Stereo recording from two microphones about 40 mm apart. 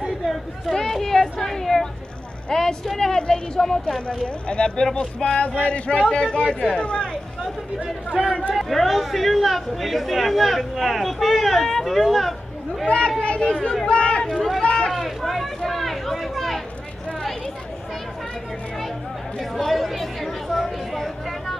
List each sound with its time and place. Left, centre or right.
0.0 s a sound: centre
2.5 s a woman's voice: centre
4.5 s speech: left
5.4 s a sound: left
6.0 s speech: left
8.2 s speech: centre
8.5 s speech: centre
12.8 s speech: left
13.8 s chatter: left
14.9 s speech: centre
19.5 s speech: centre